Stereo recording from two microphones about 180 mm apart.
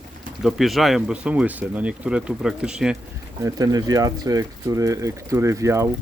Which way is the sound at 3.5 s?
20° right (ahead or behind).